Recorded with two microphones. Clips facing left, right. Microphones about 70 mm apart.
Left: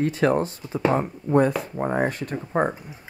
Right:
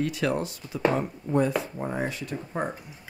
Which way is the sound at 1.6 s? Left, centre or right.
Left.